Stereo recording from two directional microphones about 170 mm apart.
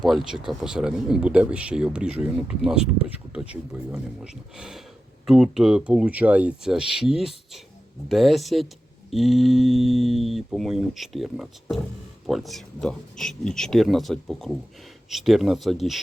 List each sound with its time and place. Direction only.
0.0 s speech: centre (ahead or behind)